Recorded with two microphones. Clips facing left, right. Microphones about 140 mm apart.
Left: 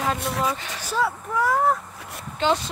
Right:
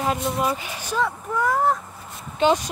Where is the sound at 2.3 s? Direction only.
15° right (ahead or behind).